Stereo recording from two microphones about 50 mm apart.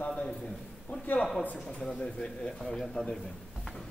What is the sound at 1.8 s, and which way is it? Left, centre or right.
A man's voice, centre.